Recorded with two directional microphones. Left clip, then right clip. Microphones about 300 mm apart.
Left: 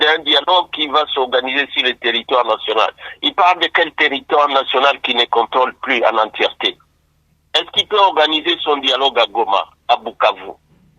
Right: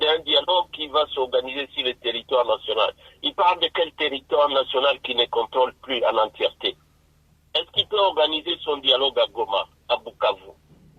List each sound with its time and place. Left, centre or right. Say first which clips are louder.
0.0 s radio: left 7 dB; left
1.3 s speech: left 8 dB; left
7.6 s speech: left 7 dB; left